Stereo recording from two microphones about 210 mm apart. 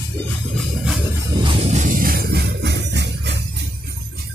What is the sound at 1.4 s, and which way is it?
Music, 30° right (ahead or behind).